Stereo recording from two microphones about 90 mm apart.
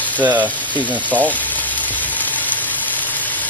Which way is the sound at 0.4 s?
15° left (ahead or behind).